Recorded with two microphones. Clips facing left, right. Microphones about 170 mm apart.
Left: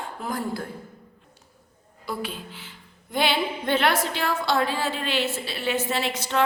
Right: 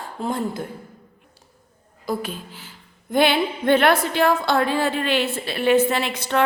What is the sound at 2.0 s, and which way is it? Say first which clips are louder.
Speech: right 5 dB; 45° right (ahead or behind).